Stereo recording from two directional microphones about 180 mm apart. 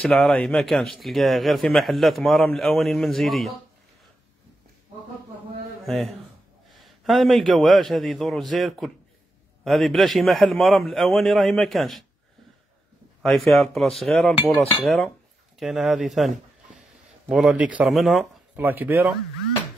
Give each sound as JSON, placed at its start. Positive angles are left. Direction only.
{"t": 0.0, "sound": "speech", "side_deg": 0}
{"t": 5.9, "sound": "speech", "side_deg": 0}
{"t": 13.2, "sound": "speech", "side_deg": 0}